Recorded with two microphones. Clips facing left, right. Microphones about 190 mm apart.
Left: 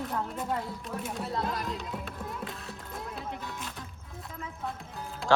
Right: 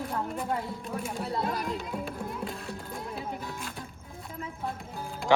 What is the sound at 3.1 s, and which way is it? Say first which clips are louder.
Music: right 2 dB; 10° right (ahead or behind).